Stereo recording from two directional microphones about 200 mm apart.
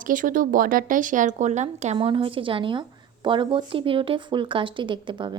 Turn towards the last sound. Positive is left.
turn(degrees=-25)  # may be behind; listen again after turning